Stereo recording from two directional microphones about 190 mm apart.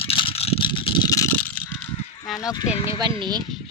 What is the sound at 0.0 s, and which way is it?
Vehicle, 30° left (ahead or behind).